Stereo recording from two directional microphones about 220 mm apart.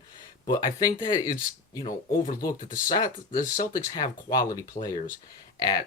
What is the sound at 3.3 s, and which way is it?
Speech, 35° left (ahead or behind).